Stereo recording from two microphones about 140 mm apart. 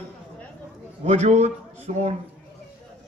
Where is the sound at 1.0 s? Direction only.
55° right (ahead or behind).